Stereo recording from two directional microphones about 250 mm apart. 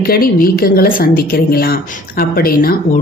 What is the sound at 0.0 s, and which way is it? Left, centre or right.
Speech, left.